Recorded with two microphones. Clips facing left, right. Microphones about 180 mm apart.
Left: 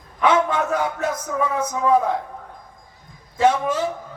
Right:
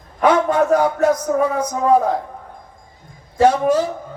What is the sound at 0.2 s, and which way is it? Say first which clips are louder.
A man's voice: right 4 dB; 40° right (ahead or behind).